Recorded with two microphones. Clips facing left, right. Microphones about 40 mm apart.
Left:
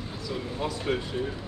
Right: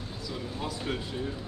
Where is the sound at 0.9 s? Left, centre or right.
Centre.